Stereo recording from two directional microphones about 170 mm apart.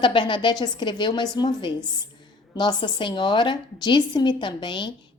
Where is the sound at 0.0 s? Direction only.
30° left (ahead or behind).